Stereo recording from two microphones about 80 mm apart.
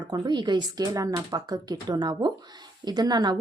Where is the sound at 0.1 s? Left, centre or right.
Right.